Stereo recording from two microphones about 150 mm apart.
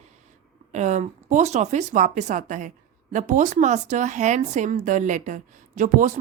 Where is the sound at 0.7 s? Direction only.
50° right (ahead or behind).